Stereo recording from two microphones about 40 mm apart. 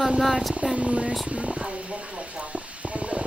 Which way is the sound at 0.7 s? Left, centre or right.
Right.